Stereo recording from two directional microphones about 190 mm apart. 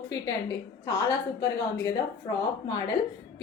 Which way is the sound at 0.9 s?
15° left (ahead or behind).